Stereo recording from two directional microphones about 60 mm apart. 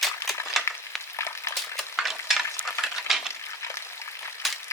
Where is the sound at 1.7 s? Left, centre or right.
Centre.